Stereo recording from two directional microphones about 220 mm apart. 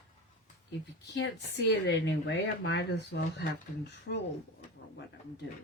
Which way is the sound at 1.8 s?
50° left (ahead or behind).